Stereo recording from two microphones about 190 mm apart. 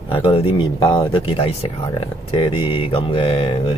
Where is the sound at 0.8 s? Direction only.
25° left (ahead or behind).